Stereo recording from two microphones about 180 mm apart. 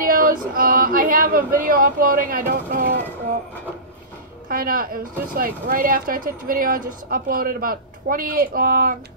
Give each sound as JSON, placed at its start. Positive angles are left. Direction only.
{"t": 0.0, "sound": "speech", "side_deg": -50}
{"t": 4.5, "sound": "speech", "side_deg": -55}